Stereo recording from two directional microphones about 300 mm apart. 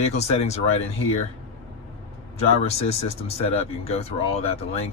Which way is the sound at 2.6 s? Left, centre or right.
Left.